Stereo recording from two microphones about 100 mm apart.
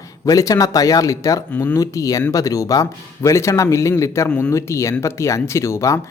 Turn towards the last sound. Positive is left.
turn(degrees=30)  # may be behind; listen again after turning